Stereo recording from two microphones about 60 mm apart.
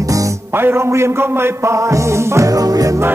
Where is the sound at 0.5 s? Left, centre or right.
Right.